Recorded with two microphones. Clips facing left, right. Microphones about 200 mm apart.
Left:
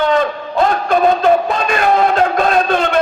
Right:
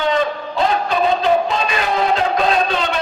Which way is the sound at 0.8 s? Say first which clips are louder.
Left 7 dB; 50° left (ahead or behind).